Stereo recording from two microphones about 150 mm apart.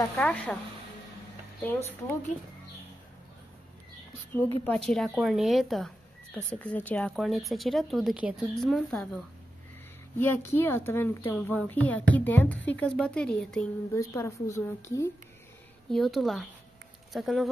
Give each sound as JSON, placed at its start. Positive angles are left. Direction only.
{"t": 0.2, "sound": "a woman's voice", "side_deg": 10}
{"t": 1.6, "sound": "a woman's voice", "side_deg": 15}
{"t": 4.3, "sound": "a woman's voice", "side_deg": 15}
{"t": 4.7, "sound": "speech", "side_deg": 5}
{"t": 10.1, "sound": "a woman's voice", "side_deg": 15}
{"t": 13.9, "sound": "speech", "side_deg": 20}
{"t": 15.9, "sound": "speech", "side_deg": 0}